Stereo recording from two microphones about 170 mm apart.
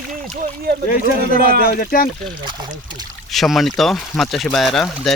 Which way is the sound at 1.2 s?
60° right (ahead or behind).